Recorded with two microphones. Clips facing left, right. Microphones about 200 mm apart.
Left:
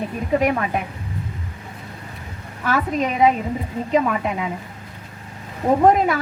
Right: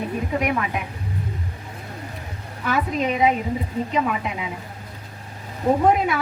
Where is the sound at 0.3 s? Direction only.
40° left (ahead or behind).